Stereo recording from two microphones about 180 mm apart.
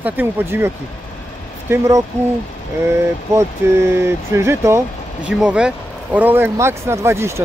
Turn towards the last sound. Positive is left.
turn(degrees=-15)  # may be behind; listen again after turning